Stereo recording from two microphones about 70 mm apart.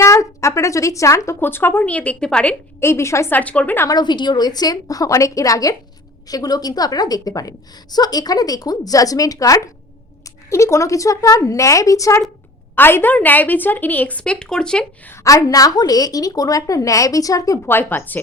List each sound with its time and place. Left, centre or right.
0.0 s speech: left
1.4 s a woman's voice: left
1.8 s a woman's voice: left
2.8 s a woman's voice: left
3.3 s a woman's voice: centre
3.8 s a woman's voice: left
6.2 s a woman's voice: left
10.2 s a woman's voice: left
12.7 s a woman's voice: left; by 14.8 s centre
15.1 s a woman's voice: left
17.7 s a woman's voice: left